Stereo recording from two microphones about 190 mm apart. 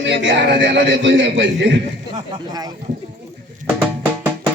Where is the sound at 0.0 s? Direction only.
75° right (ahead or behind).